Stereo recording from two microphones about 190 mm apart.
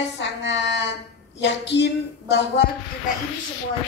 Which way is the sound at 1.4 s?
65° left (ahead or behind).